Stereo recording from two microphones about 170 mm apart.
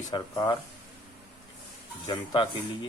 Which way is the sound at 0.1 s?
25° left (ahead or behind).